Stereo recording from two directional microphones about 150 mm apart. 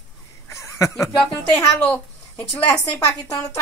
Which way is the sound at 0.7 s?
20° left (ahead or behind).